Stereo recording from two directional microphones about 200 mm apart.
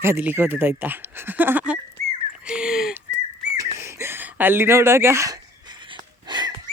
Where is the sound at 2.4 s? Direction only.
5° right (ahead or behind).